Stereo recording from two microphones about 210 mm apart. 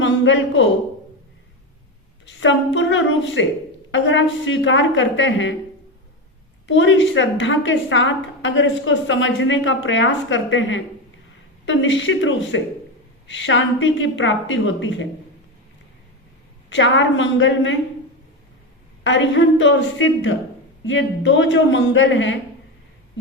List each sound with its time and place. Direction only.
0.0 s a woman's voice: 60° left (ahead or behind)
2.2 s a sound: 60° left (ahead or behind)
2.7 s a woman's voice: 60° left (ahead or behind)
6.7 s a woman's voice: 60° left (ahead or behind)
16.6 s a woman's voice: 60° left (ahead or behind)
19.0 s a woman's voice: 60° left (ahead or behind)